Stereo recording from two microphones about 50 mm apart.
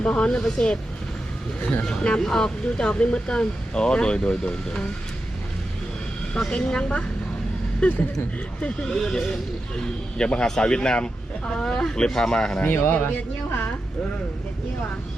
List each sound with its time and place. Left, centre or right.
0.0 s speech: left
2.0 s speech: centre
6.7 s speech: centre
12.5 s speech: left